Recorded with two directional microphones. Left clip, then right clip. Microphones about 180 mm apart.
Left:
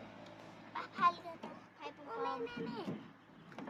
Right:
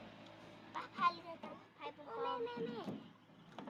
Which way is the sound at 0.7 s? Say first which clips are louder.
Left 4 dB; 50° left (ahead or behind).